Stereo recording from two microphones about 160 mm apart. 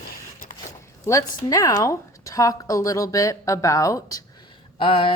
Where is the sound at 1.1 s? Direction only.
20° left (ahead or behind).